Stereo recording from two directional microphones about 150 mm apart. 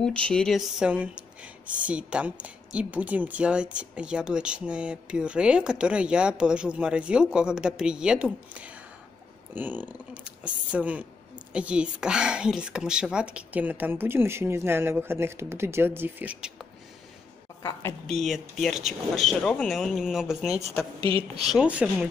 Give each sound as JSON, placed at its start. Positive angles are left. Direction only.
{"t": 0.0, "sound": "speech", "side_deg": 5}
{"t": 17.6, "sound": "a woman's voice", "side_deg": 20}
{"t": 18.2, "sound": "speech", "side_deg": 0}
{"t": 21.0, "sound": "speech", "side_deg": -40}
{"t": 21.5, "sound": "speech", "side_deg": -5}